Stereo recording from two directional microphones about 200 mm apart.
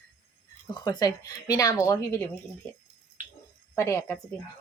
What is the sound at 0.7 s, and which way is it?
Speech, 20° left (ahead or behind).